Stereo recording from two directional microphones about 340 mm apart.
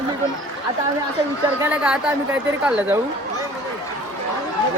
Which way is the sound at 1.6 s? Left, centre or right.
Centre.